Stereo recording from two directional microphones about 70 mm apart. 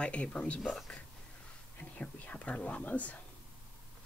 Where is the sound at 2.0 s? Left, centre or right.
Centre.